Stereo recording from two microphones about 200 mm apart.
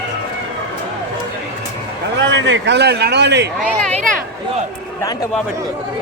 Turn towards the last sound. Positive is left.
turn(degrees=-40)  # may be behind; listen again after turning